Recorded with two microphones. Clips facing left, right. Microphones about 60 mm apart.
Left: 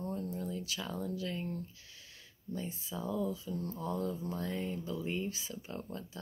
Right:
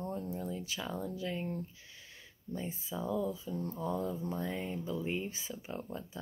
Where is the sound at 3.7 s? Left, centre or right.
Centre.